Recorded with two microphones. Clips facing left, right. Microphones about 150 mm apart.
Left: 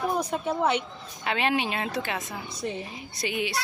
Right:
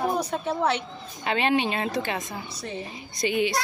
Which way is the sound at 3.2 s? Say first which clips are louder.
Right 5 dB; 5° left (ahead or behind).